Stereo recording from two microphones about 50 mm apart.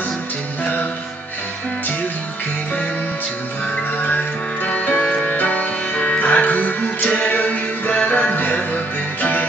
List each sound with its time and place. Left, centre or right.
4.0 s music: left